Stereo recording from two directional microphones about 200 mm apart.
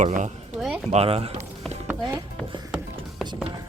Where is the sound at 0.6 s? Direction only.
Centre (ahead or behind).